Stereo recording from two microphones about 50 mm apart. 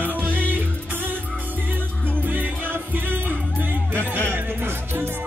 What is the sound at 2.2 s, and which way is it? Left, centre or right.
Music, right.